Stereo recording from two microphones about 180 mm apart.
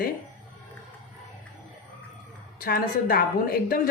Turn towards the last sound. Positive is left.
turn(degrees=55)  # may be behind; listen again after turning